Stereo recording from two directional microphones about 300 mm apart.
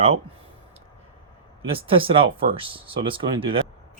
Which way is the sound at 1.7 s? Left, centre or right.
Centre.